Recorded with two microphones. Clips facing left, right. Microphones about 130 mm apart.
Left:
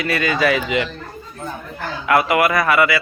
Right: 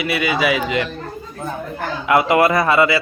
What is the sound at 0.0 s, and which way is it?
Speech, 10° right (ahead or behind).